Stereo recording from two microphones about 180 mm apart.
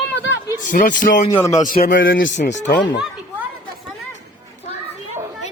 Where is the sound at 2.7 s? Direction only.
80° left.